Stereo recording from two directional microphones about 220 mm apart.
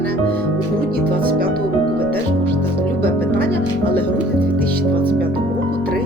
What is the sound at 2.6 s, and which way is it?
Music, 10° left (ahead or behind).